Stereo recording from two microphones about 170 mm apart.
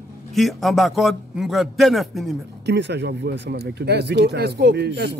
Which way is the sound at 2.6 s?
90° right.